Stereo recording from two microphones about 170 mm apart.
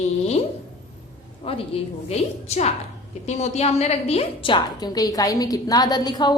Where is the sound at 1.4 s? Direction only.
35° left (ahead or behind).